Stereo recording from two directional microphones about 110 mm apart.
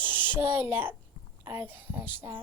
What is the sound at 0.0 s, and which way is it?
A child's voice, 15° right (ahead or behind).